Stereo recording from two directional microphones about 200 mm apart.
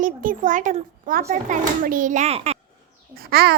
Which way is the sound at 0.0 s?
40° right (ahead or behind).